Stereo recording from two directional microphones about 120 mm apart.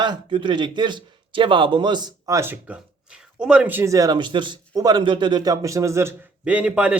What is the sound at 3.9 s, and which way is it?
Speech, 30° right (ahead or behind).